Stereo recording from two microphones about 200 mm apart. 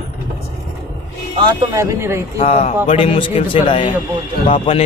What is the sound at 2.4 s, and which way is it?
A man's voice, 30° left (ahead or behind).